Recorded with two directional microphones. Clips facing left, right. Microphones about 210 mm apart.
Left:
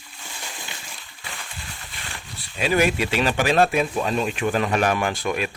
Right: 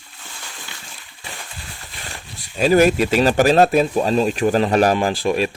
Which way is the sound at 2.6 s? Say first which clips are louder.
Right 7 dB; 40° right (ahead or behind).